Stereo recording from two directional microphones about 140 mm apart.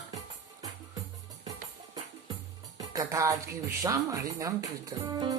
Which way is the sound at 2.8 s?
25° right (ahead or behind).